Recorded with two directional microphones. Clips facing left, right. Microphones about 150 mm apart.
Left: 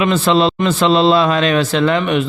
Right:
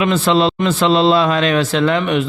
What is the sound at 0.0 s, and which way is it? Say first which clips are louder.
A man's voice: left 1 dB; 35° left (ahead or behind).